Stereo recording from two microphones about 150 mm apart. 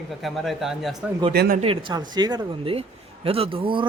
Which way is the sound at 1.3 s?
90° right.